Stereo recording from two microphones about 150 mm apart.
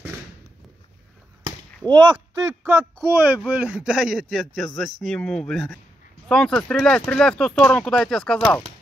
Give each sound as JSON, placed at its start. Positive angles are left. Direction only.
{"t": 1.9, "sound": "speech", "side_deg": -30}
{"t": 3.1, "sound": "speech", "side_deg": -10}